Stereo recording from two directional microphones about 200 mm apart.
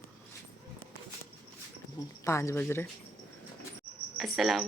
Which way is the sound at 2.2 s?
15° left (ahead or behind).